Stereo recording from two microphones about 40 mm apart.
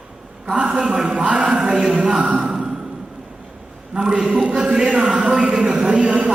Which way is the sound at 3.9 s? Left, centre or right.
Centre.